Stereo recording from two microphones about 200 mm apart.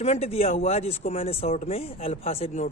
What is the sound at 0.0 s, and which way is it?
Speech, 30° left (ahead or behind).